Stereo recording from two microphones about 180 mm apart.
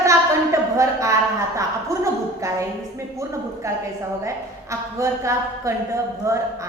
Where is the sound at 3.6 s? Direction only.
15° right (ahead or behind).